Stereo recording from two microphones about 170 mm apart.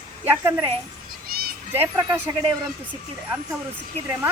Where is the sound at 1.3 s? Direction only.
60° right (ahead or behind).